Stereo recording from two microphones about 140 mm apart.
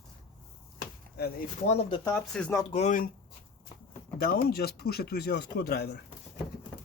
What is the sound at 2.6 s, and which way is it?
Speech, 45° left (ahead or behind).